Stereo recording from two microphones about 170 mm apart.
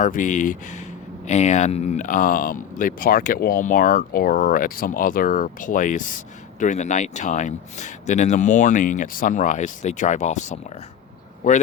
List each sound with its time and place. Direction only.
0.0 s speech: 50° left (ahead or behind)